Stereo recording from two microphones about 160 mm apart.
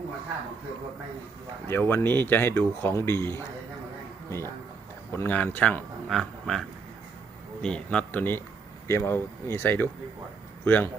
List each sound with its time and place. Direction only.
1.6 s speech: 15° left (ahead or behind)